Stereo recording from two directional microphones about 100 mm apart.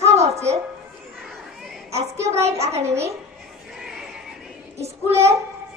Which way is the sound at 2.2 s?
30° right (ahead or behind).